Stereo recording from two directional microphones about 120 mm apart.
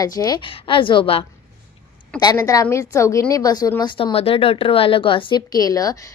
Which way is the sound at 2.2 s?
30° left (ahead or behind).